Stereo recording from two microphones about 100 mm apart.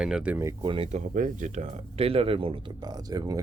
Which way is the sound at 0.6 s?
60° right (ahead or behind).